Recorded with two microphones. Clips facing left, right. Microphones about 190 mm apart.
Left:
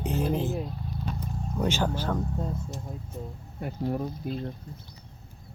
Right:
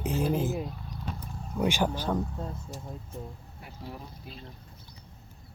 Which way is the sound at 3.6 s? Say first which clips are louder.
Left 13 dB; 50° left (ahead or behind).